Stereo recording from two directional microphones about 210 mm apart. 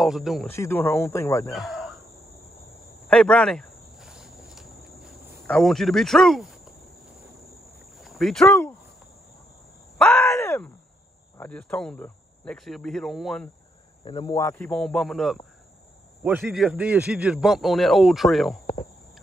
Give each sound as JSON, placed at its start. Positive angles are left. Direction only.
{"t": 0.0, "sound": "a man's voice", "side_deg": 0}
{"t": 0.5, "sound": "speech", "side_deg": 10}
{"t": 1.5, "sound": "cricket", "side_deg": 0}
{"t": 3.1, "sound": "cricket", "side_deg": 5}
{"t": 7.8, "sound": "boat", "side_deg": 0}
{"t": 9.9, "sound": "groan", "side_deg": 5}
{"t": 11.3, "sound": "a man's voice", "side_deg": 5}
{"t": 14.0, "sound": "speech", "side_deg": 25}
{"t": 14.3, "sound": "a man's voice", "side_deg": 10}
{"t": 16.2, "sound": "a man's voice", "side_deg": -10}